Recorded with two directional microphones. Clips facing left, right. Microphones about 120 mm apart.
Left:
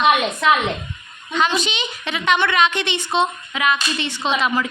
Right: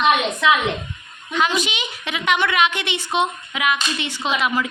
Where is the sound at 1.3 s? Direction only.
10° right (ahead or behind).